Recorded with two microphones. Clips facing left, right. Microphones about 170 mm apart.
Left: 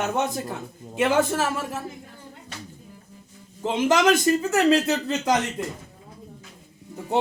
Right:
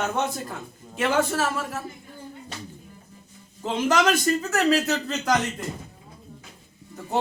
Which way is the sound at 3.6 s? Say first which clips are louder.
Left 2 dB; 20° left (ahead or behind).